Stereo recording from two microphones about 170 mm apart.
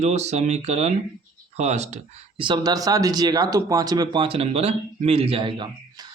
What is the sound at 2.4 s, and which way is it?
Speech, 25° right (ahead or behind).